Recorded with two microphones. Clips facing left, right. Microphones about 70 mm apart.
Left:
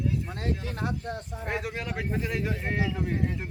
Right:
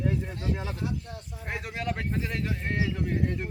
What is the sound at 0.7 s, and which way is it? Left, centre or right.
Speech, left.